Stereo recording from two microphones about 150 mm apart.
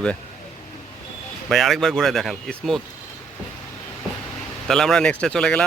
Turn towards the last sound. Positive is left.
turn(degrees=5)  # may be behind; listen again after turning